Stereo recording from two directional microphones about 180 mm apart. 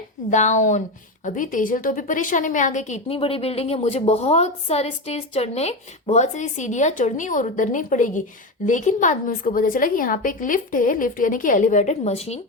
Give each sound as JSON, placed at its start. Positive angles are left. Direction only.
{"t": 0.3, "sound": "a woman's voice", "side_deg": 40}